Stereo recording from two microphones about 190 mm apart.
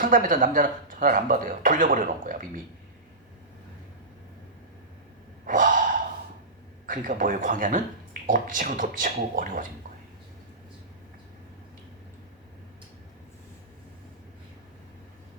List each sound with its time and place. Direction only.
0.0 s speech: 45° right (ahead or behind)
5.5 s gasp: 45° right (ahead or behind)
6.8 s speech: 45° right (ahead or behind)